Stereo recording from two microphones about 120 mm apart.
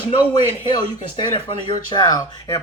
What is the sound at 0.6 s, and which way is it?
Speech, 40° left (ahead or behind).